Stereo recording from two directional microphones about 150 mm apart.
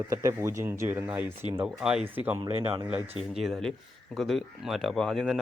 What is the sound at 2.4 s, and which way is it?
Speech, 30° right (ahead or behind).